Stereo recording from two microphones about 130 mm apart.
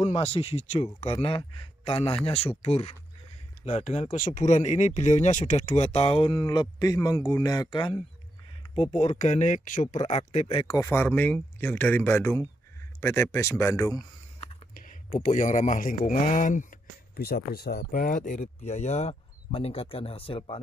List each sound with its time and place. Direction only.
0.0 s speech: 55° left (ahead or behind); by 8.0 s 35° left (ahead or behind)
8.7 s speech: 55° left (ahead or behind)
9.2 s speech: 70° left (ahead or behind)
10.8 s speech: 20° left (ahead or behind)
14.7 s speech: 90° left
17.9 s speech: 90° left; by 20.5 s 45° left (ahead or behind)